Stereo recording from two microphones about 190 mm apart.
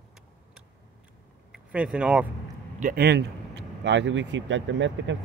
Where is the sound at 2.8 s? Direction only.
50° right (ahead or behind); by 5.2 s 75° right (ahead or behind).